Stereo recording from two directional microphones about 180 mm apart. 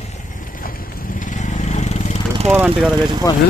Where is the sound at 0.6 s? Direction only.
50° left (ahead or behind).